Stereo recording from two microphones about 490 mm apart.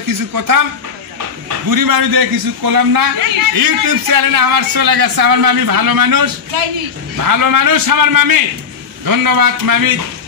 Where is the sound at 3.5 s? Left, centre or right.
Right.